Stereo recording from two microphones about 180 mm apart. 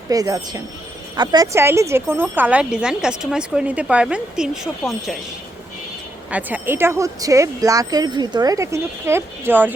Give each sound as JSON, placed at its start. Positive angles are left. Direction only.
{"t": 0.1, "sound": "speech", "side_deg": -20}
{"t": 6.3, "sound": "speech", "side_deg": -10}